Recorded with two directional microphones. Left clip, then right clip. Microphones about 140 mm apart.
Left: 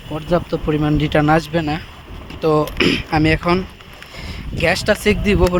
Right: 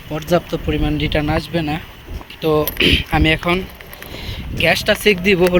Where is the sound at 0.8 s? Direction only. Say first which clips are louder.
Left 4 dB; 55° left (ahead or behind).